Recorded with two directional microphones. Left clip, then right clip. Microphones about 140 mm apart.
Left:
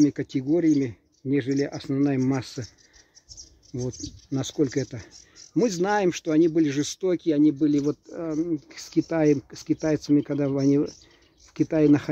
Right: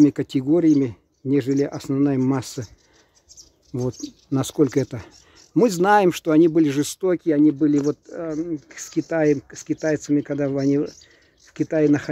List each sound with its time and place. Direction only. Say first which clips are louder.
0.0 s speech: right 5 dB; 30° right (ahead or behind)
3.7 s speech: right 5 dB; 35° right (ahead or behind); by 7.7 s 15° right (ahead or behind)
7.8 s speech: right 3 dB; 5° left (ahead or behind); by 12.1 s 20° left (ahead or behind)